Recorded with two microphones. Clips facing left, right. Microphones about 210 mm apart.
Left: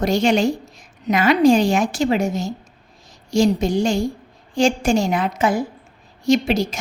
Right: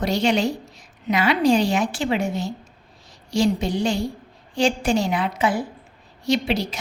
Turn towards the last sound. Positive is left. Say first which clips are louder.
# left 5 dB
turn(degrees=45)  # may be behind; listen again after turning